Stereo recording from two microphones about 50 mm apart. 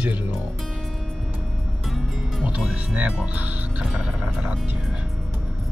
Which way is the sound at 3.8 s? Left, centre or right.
Centre.